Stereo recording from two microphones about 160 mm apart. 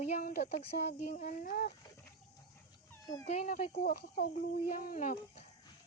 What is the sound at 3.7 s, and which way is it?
Speech, 75° left (ahead or behind).